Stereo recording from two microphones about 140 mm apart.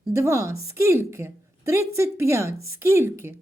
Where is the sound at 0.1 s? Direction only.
20° right (ahead or behind).